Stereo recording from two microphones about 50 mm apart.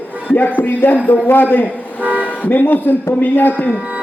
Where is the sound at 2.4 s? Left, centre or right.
Left.